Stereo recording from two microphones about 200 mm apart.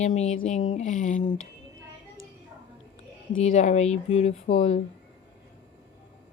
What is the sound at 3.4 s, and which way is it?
A woman's voice, 40° left (ahead or behind).